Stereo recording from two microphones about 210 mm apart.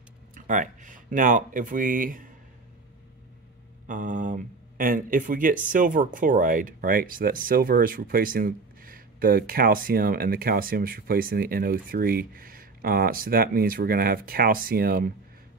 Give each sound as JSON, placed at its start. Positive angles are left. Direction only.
{"t": 0.3, "sound": "speech", "side_deg": -35}
{"t": 3.8, "sound": "speech", "side_deg": -40}